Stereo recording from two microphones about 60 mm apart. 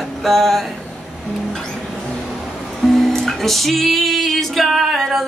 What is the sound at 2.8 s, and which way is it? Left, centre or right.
Music, centre.